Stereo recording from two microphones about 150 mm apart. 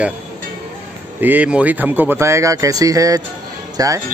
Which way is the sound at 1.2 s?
10° right (ahead or behind).